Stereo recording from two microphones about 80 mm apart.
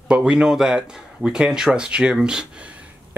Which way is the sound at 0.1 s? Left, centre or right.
Centre.